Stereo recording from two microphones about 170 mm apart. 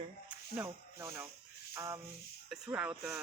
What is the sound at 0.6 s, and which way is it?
Speech, 15° right (ahead or behind).